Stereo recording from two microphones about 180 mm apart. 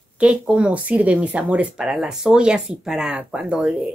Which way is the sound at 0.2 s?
5° right (ahead or behind).